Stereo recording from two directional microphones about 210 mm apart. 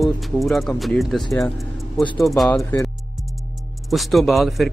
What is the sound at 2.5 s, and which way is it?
Speech, 15° left (ahead or behind).